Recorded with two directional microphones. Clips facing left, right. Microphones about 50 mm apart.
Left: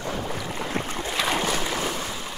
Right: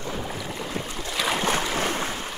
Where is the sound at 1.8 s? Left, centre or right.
Right.